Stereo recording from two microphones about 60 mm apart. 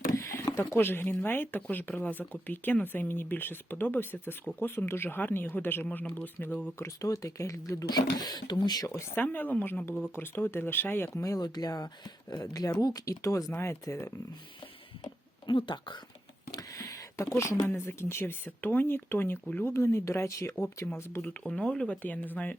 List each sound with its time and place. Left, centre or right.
0.1 s a sound: left
0.7 s speech: left
6.7 s speech: left
9.1 s speech: left
11.1 s speech: left
16.5 s a sound: left
17.7 s speech: left
20.8 s speech: left
21.2 s speech: centre
22.0 s speech: left